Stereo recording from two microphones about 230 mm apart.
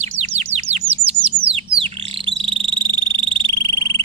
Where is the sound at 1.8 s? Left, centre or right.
Right.